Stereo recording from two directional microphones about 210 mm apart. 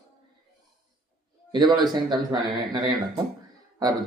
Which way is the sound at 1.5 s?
20° right (ahead or behind).